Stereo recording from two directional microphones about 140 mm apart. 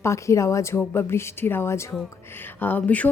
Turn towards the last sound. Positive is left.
turn(degrees=10)  # may be behind; listen again after turning